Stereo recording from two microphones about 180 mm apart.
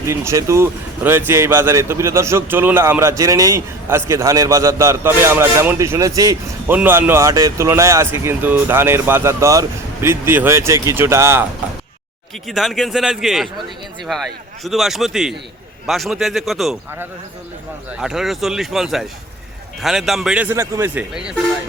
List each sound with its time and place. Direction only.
0.0 s speech: 15° right (ahead or behind)
12.5 s speech: centre (ahead or behind)
17.9 s speech: 5° right (ahead or behind)